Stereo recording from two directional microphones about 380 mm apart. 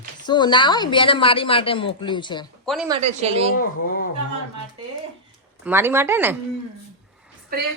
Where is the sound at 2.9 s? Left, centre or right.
Centre.